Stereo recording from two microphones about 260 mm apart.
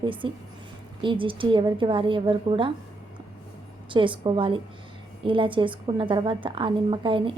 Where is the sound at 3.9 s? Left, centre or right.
Centre.